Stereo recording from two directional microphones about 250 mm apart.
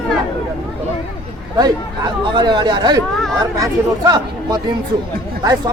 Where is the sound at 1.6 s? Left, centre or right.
Centre.